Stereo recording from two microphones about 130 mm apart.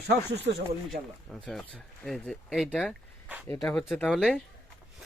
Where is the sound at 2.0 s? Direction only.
Centre (ahead or behind).